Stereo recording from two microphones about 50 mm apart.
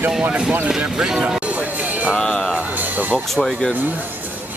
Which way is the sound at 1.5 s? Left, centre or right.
Right.